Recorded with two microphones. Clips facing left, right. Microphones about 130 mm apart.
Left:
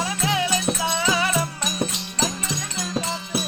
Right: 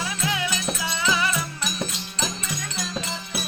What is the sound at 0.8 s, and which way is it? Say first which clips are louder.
Music: left 2 dB; 25° left (ahead or behind).